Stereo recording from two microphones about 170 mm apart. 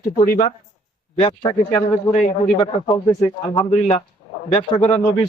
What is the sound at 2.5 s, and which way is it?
Speech, 20° left (ahead or behind).